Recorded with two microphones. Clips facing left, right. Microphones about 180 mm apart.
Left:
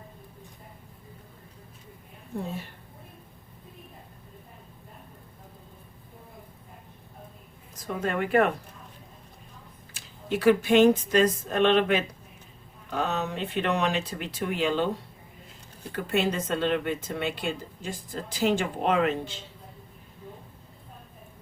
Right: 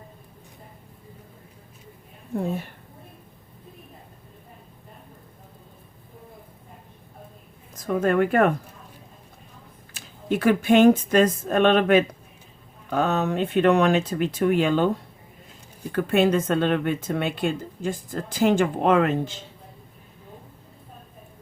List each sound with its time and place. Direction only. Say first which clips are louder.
7.8 s speech: right 8 dB; 50° right (ahead or behind)
9.9 s speech: right 4 dB; 50° right (ahead or behind)
15.9 s speech: right 7 dB; 55° right (ahead or behind)